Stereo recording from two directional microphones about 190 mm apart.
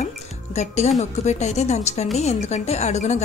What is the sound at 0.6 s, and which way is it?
A woman's voice, 35° left (ahead or behind).